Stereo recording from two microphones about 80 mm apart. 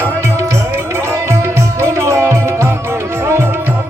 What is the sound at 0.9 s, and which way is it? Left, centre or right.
Music, right.